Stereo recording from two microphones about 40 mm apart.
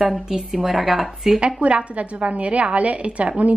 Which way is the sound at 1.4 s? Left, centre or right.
Right.